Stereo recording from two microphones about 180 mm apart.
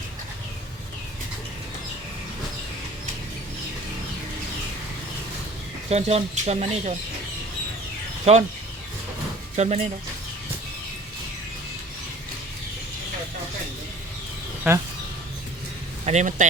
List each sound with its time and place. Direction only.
5.9 s speech: 35° right (ahead or behind)
8.2 s speech: 40° right (ahead or behind)
9.6 s speech: 35° right (ahead or behind)
16.0 s speech: 40° right (ahead or behind)